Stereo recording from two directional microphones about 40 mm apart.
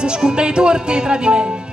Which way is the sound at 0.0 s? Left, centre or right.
Right.